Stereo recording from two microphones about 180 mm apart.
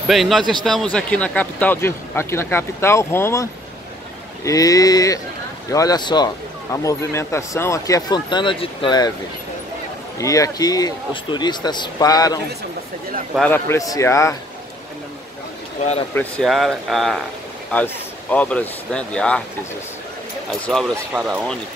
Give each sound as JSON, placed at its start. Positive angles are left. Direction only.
{"t": 0.1, "sound": "speech", "side_deg": 0}
{"t": 4.5, "sound": "speech", "side_deg": 20}
{"t": 10.1, "sound": "speech", "side_deg": 20}
{"t": 13.5, "sound": "speech", "side_deg": 15}
{"t": 16.2, "sound": "speech", "side_deg": 5}
{"t": 20.7, "sound": "speech", "side_deg": 5}
{"t": 21.1, "sound": "speech", "side_deg": -5}